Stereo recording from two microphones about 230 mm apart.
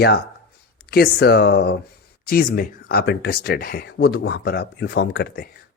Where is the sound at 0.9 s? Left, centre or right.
Left.